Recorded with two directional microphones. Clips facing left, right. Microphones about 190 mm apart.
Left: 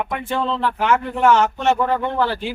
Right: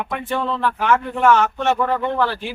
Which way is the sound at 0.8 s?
15° left (ahead or behind).